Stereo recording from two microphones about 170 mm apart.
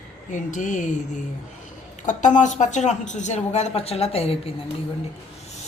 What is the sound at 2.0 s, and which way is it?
Speech, 45° left (ahead or behind).